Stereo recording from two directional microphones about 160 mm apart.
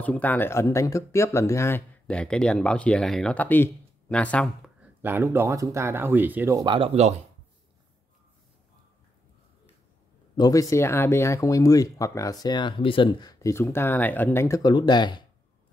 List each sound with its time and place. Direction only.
0.0 s speech: 10° left (ahead or behind)
2.0 s speech: 5° left (ahead or behind)
5.0 s speech: 15° right (ahead or behind)
6.6 s speech: 30° right (ahead or behind)
10.3 s speech: 25° left (ahead or behind)